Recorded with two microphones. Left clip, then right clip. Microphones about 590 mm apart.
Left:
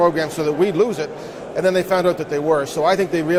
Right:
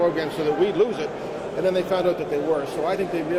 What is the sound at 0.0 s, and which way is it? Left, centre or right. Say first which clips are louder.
Speech: left 5 dB; left.